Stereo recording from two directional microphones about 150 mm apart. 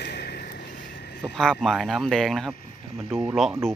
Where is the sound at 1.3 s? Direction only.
5° left (ahead or behind).